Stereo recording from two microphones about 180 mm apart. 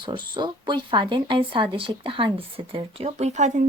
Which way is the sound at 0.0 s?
25° right (ahead or behind).